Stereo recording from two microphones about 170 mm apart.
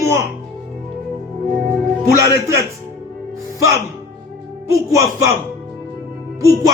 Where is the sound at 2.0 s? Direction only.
15° right (ahead or behind).